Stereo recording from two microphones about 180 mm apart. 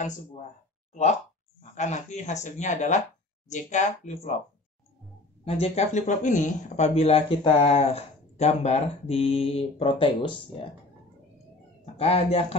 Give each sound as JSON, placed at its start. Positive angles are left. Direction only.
{"t": 1.6, "sound": "speech", "side_deg": 40}
{"t": 5.4, "sound": "speech", "side_deg": 35}
{"t": 11.8, "sound": "speech", "side_deg": 35}